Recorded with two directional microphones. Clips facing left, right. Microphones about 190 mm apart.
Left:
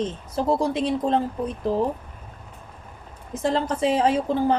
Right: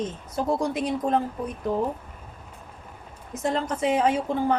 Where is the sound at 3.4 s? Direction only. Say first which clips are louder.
Left 3 dB; 30° left (ahead or behind).